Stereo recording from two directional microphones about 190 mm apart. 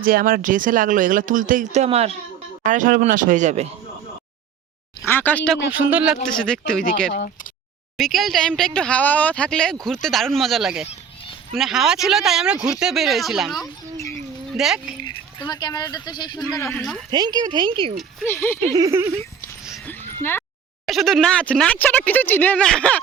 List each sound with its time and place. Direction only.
0.0 s speech: 50° right (ahead or behind)
5.0 s speech: 10° left (ahead or behind)
5.9 s speech: 5° right (ahead or behind)
6.3 s speech: 5° left (ahead or behind)
7.9 s speech: centre (ahead or behind)
15.0 s speech: 20° left (ahead or behind)
17.1 s speech: 25° right (ahead or behind)
18.3 s speech: 10° left (ahead or behind)
18.7 s speech: 15° right (ahead or behind)
19.8 s a sound: 10° left (ahead or behind)
20.8 s speech: centre (ahead or behind)